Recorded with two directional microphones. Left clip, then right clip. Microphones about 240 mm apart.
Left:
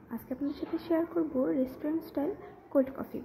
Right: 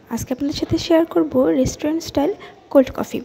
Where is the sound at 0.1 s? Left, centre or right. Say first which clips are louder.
Right 13 dB; right.